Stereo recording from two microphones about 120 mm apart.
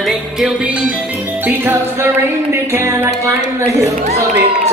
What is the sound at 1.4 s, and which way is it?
Music, 20° right (ahead or behind).